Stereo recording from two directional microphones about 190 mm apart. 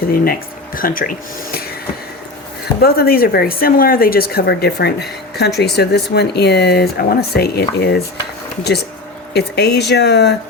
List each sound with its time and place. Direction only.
0.1 s speech: 50° left (ahead or behind)
2.8 s speech: 55° left (ahead or behind)
9.3 s speech: 60° left (ahead or behind)